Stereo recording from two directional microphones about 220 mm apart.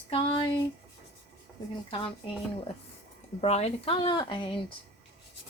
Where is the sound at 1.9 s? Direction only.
25° left (ahead or behind).